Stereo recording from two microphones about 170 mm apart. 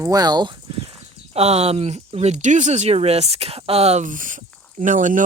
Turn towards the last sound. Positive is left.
turn(degrees=-50)  # may be behind; listen again after turning